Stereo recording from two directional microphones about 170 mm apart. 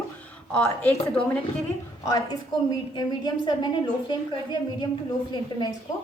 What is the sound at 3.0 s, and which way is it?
Speech, 25° left (ahead or behind).